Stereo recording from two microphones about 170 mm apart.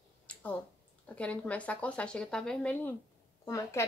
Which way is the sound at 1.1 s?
10° left (ahead or behind).